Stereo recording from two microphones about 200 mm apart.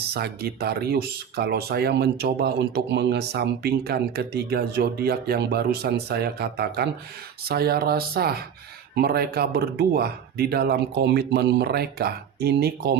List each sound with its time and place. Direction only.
0.1 s speech: 50° right (ahead or behind)